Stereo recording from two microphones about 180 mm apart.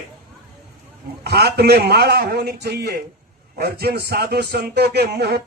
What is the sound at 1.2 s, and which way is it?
A man's voice, 65° right (ahead or behind).